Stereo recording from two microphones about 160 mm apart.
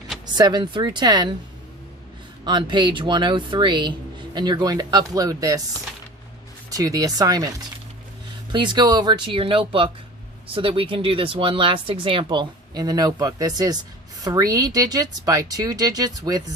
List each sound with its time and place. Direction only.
0.3 s speech: 25° right (ahead or behind)
2.4 s speech: 30° right (ahead or behind)
6.7 s speech: 20° right (ahead or behind)
8.5 s speech: 30° right (ahead or behind)